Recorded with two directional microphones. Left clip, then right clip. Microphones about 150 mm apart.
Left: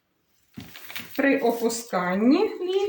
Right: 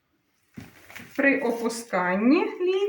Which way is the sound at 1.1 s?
15° left (ahead or behind).